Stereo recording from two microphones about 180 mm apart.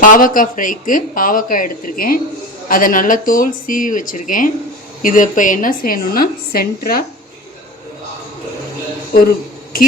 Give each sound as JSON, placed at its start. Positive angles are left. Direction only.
{"t": 0.0, "sound": "speech", "side_deg": 50}